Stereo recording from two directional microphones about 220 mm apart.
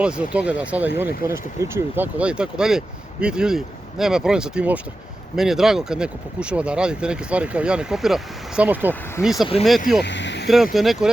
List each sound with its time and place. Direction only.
0.0 s speech: 5° right (ahead or behind)
10.0 s vehicle: 55° left (ahead or behind)
10.5 s speech: centre (ahead or behind)